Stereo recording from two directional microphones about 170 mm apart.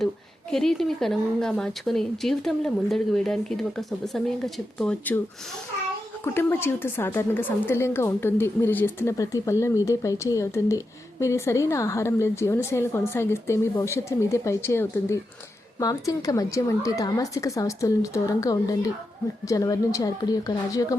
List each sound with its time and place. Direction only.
0.5 s a woman's voice: centre (ahead or behind)
6.2 s a woman's voice: 15° left (ahead or behind)